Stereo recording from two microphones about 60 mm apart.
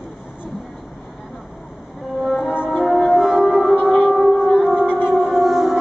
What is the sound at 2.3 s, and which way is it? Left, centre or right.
French horn, centre.